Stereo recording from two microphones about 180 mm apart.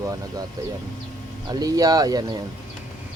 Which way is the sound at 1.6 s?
20° right (ahead or behind).